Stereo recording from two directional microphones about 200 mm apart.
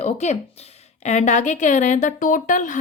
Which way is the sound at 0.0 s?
35° left (ahead or behind).